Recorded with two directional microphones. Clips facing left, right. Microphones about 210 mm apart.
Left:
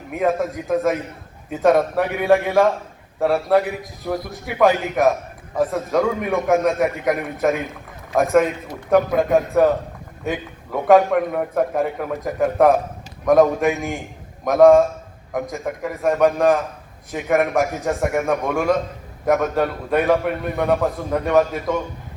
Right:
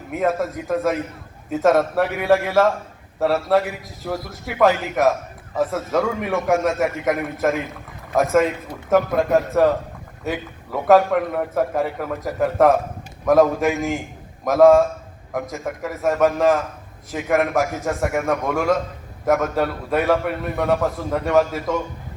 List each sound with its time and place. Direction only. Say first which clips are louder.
0.1 s a man's voice: left 1 dB; centre (ahead or behind)